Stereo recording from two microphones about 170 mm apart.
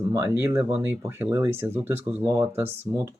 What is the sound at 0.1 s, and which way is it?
Speech, 15° right (ahead or behind).